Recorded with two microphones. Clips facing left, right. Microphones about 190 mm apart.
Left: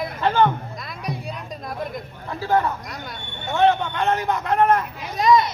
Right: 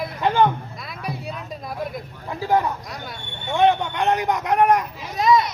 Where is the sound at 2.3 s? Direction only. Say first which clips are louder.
Even; 15° right (ahead or behind).